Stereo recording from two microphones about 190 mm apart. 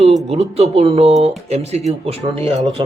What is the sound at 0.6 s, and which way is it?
Speech, 30° right (ahead or behind).